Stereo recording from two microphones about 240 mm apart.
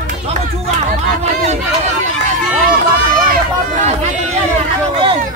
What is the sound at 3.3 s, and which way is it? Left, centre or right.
Run, right.